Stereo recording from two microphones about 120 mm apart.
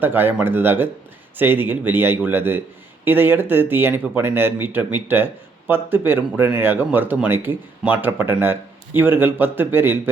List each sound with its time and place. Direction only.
0.0 s speech: 15° right (ahead or behind)